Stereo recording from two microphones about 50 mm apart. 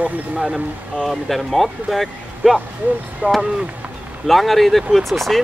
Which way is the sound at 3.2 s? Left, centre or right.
Right.